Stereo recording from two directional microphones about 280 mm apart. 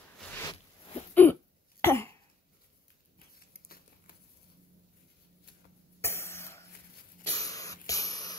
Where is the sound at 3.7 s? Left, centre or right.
Left.